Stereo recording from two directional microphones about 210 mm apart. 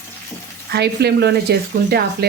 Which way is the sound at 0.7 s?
50° right (ahead or behind).